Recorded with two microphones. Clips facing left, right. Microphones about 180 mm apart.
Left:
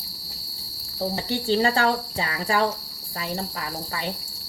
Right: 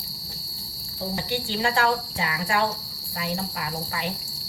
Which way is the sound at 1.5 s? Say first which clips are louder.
Left 3 dB; 35° left (ahead or behind).